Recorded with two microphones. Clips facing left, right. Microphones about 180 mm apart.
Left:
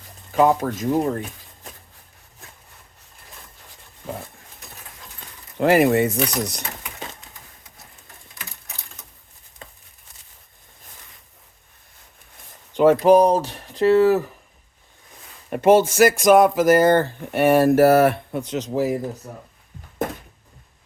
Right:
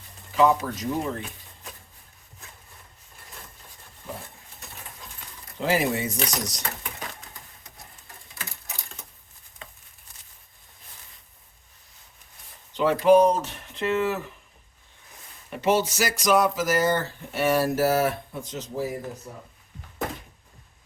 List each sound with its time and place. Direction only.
0.3 s speech: 50° left (ahead or behind)
4.1 s dog: 90° left
5.5 s speech: 60° left (ahead or behind)
12.7 s speech: 45° left (ahead or behind)
15.4 s speech: 50° left (ahead or behind); by 18.9 s 80° left